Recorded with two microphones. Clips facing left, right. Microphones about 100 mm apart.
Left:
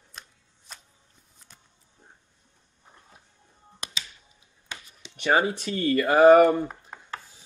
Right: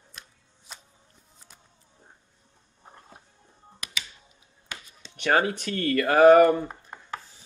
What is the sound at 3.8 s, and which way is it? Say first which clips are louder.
Music: left 1 dB; 30° left (ahead or behind).